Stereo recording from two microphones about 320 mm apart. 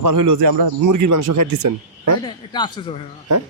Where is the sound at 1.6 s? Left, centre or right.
Right.